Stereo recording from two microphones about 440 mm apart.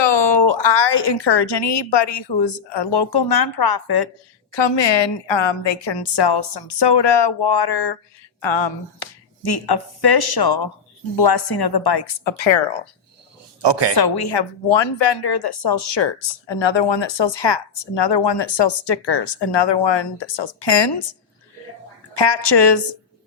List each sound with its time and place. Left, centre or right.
0.0 s a woman's voice: left
4.5 s speech: left
8.4 s a woman's voice: left
13.6 s speech: right
13.9 s speech: left
22.1 s a woman's voice: left